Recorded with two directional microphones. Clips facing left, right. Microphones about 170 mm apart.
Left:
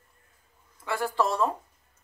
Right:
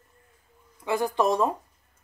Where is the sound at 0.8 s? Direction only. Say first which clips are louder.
Right 3 dB; 20° right (ahead or behind).